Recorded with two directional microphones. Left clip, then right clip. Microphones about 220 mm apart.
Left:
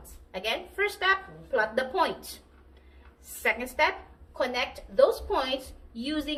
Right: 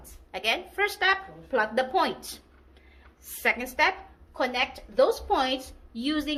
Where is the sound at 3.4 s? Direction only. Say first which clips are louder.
Right 1 dB; 40° right (ahead or behind).